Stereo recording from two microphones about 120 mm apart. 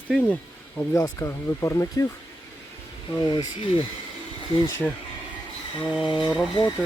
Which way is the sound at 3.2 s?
40° left (ahead or behind).